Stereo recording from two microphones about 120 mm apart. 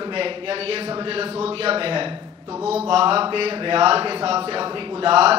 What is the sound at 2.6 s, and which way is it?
A man's voice, 60° right (ahead or behind).